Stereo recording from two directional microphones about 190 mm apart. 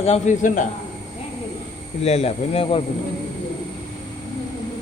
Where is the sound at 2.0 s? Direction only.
35° left (ahead or behind).